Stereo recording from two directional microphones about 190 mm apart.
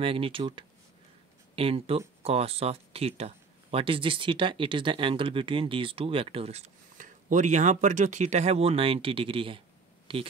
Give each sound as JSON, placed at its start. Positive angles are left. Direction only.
{"t": 0.0, "sound": "speech", "side_deg": -30}